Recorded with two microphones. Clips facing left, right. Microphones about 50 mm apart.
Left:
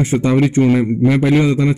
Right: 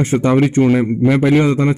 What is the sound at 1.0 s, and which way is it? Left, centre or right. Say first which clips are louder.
Speech: right 1 dB; right.